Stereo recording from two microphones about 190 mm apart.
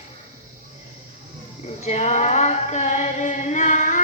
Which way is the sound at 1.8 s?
35° left (ahead or behind).